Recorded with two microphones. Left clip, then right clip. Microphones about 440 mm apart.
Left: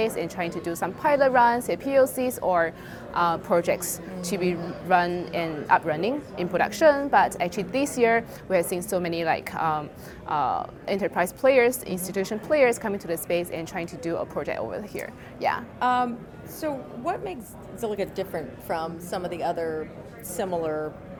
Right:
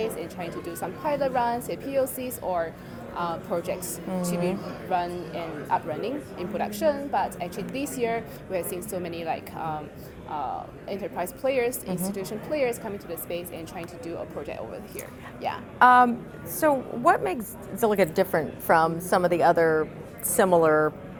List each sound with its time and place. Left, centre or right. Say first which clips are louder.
0.0 s a woman's voice: left 4 dB; left
15.8 s a woman's voice: right 8 dB; right